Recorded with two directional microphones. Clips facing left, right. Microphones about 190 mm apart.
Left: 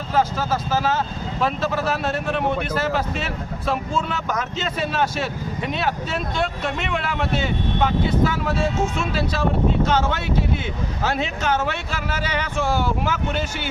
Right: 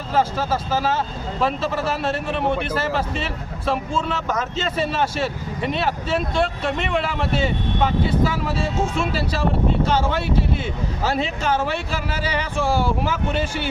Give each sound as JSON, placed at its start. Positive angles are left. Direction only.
{"t": 0.3, "sound": "speech", "side_deg": -5}
{"t": 2.0, "sound": "speech", "side_deg": 0}
{"t": 4.8, "sound": "speech", "side_deg": -5}
{"t": 12.1, "sound": "speech", "side_deg": -35}